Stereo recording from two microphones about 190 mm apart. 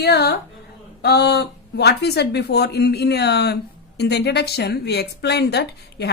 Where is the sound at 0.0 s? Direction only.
55° left (ahead or behind).